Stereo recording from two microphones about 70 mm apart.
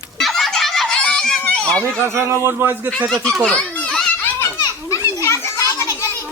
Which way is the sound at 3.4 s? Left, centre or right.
Centre.